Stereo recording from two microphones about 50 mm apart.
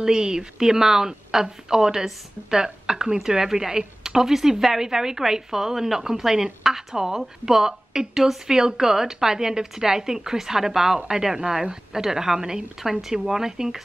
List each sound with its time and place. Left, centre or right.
0.0 s a woman's voice: centre